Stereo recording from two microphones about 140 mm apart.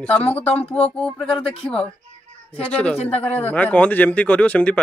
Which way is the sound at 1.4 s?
40° left (ahead or behind).